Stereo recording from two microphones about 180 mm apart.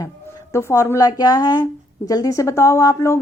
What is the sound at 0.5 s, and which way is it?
A woman's voice, 15° left (ahead or behind).